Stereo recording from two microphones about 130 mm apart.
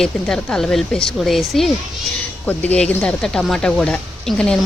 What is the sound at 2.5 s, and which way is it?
Speech, 10° left (ahead or behind).